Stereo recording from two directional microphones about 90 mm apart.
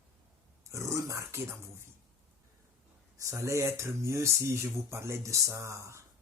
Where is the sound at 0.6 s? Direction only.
35° right (ahead or behind).